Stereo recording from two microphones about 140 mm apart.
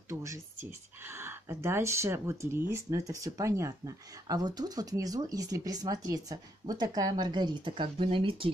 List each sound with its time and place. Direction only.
0.1 s speech: 20° right (ahead or behind); by 8.5 s 40° right (ahead or behind)